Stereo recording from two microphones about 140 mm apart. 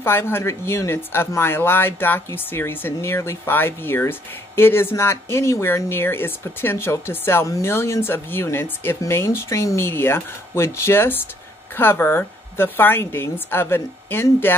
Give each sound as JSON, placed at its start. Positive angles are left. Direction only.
{"t": 0.0, "sound": "speech", "side_deg": 15}